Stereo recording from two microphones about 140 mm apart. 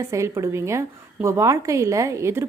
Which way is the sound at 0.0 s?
20° right (ahead or behind).